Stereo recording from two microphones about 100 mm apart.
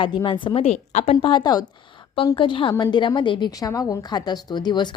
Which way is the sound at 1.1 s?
55° left (ahead or behind).